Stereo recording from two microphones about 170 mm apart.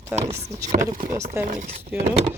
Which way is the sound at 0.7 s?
45° right (ahead or behind).